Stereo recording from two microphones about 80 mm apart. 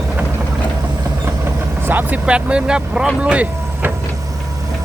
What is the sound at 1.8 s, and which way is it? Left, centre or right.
Speech, right.